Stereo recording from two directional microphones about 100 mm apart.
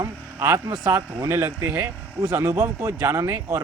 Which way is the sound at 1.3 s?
25° right (ahead or behind).